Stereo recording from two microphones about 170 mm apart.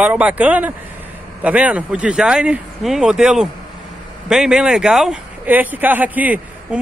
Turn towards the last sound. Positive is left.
turn(degrees=-10)  # may be behind; listen again after turning